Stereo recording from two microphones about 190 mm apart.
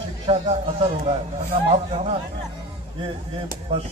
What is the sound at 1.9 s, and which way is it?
Speech, 35° right (ahead or behind).